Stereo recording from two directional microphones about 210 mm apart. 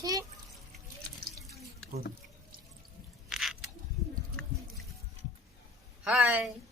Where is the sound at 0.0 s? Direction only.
15° right (ahead or behind).